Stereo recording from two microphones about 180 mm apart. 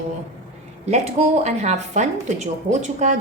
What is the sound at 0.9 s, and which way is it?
Speech, 40° right (ahead or behind).